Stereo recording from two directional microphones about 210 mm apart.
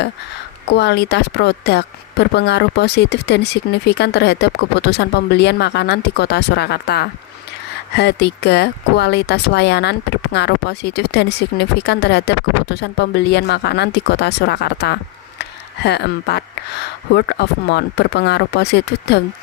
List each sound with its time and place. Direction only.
0.7 s speech: 55° left (ahead or behind)